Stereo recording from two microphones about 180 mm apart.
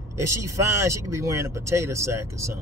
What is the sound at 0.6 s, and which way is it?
Speech, 15° right (ahead or behind).